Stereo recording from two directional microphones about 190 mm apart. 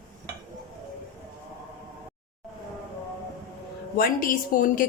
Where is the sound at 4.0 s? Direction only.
50° left (ahead or behind).